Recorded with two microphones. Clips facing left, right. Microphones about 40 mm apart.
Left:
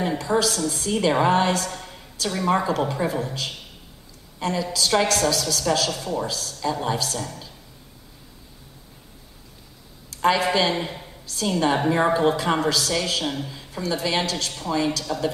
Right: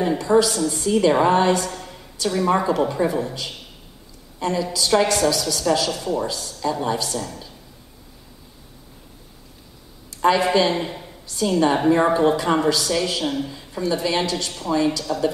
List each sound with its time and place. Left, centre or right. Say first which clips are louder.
0.0 s a woman's voice: right 5 dB; centre
0.9 s a woman's voice: right 3 dB; centre
6.6 s a woman's voice: right 2 dB; centre
10.2 s a man's voice: right 3 dB; centre